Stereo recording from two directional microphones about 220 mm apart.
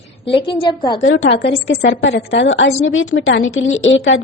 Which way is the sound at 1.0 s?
60° left (ahead or behind).